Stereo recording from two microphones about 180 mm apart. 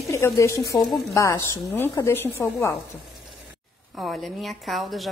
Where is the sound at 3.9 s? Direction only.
Centre (ahead or behind).